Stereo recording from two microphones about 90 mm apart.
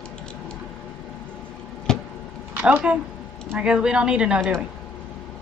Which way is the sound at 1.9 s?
5° left (ahead or behind).